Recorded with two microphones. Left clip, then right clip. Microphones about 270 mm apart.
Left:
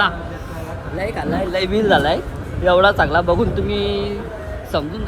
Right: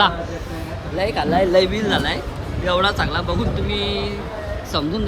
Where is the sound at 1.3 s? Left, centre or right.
Centre.